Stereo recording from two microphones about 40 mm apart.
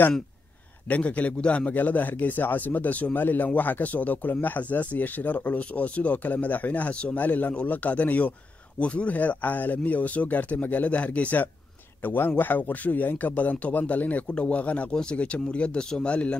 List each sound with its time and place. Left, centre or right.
0.8 s speech: left
1.7 s speech: left
12.0 s a man's voice: left
14.9 s speech: centre
15.1 s speech: left